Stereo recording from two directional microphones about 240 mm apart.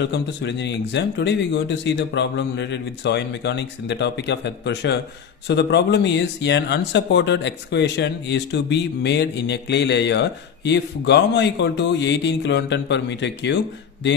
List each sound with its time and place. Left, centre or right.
0.0 s speech: left